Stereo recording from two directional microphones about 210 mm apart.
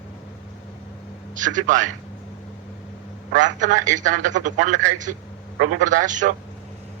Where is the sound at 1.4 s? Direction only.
35° right (ahead or behind).